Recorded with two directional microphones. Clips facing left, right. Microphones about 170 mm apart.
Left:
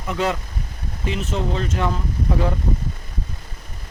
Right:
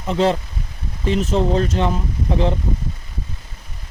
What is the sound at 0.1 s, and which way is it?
Speech, 30° right (ahead or behind).